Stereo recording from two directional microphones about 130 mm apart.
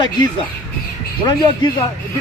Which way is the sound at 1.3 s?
35° left (ahead or behind).